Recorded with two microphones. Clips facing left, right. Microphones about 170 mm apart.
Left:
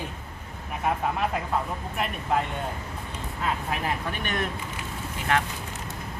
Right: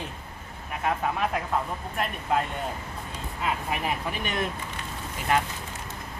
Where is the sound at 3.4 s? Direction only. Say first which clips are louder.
Even; 10° right (ahead or behind).